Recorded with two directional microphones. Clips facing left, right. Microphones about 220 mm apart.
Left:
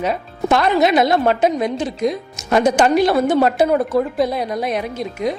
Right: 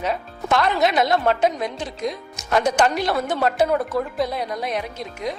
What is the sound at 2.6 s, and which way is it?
Speech, 10° left (ahead or behind).